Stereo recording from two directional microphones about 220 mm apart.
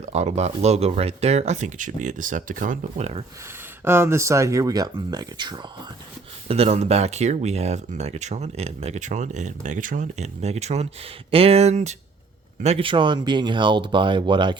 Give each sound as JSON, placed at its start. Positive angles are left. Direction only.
{"t": 0.0, "sound": "speech", "side_deg": -30}
{"t": 3.8, "sound": "speech", "side_deg": -10}